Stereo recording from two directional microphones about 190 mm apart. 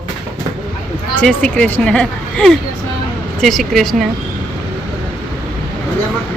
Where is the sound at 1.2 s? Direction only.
5° left (ahead or behind).